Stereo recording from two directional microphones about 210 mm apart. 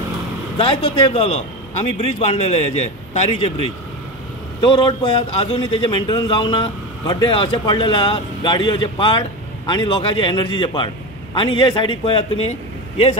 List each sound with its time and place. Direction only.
0.6 s a man's voice: 25° left (ahead or behind)